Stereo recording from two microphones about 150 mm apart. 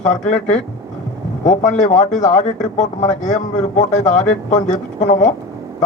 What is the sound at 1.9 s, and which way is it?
Speech, 50° left (ahead or behind).